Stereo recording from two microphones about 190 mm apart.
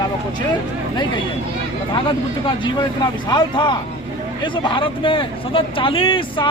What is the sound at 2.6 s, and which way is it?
Speech, 25° left (ahead or behind).